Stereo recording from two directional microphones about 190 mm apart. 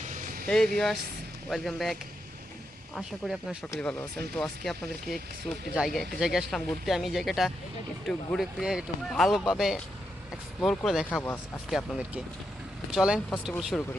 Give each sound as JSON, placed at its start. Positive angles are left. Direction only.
{"t": 0.0, "sound": "vehicle", "side_deg": -45}
{"t": 0.4, "sound": "speech", "side_deg": 5}
{"t": 11.2, "sound": "speech", "side_deg": 10}
{"t": 11.7, "sound": "speech", "side_deg": 0}